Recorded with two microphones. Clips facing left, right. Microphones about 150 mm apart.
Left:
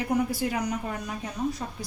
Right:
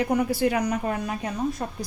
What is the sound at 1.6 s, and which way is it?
Speech, 50° right (ahead or behind).